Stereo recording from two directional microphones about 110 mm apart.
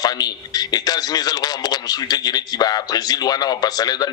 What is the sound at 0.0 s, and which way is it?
A man's voice, 35° left (ahead or behind).